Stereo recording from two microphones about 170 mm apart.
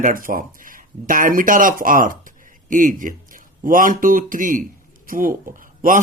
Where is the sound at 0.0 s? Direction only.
55° right (ahead or behind).